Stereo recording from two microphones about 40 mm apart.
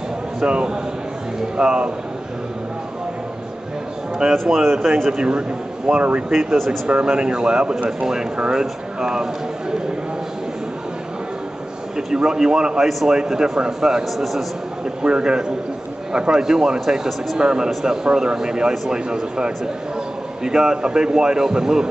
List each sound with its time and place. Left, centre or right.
0.4 s a man's voice: right
4.3 s a man's voice: centre
12.1 s a man's voice: centre
14.1 s a man's voice: centre
15.0 s a man's voice: right
17.4 s a man's voice: right